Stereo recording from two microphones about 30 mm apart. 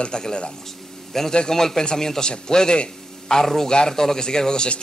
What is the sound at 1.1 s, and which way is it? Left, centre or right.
A man's voice, centre.